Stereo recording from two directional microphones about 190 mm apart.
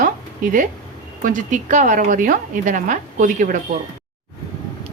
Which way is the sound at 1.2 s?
40° right (ahead or behind).